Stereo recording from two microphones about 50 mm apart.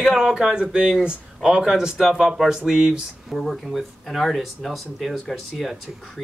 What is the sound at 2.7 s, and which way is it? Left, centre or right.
Speech, centre.